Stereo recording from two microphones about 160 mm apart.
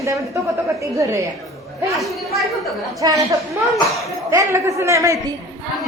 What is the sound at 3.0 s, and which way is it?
Speech, 25° right (ahead or behind).